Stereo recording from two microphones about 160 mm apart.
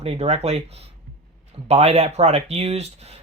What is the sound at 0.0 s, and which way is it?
Speech, 40° right (ahead or behind).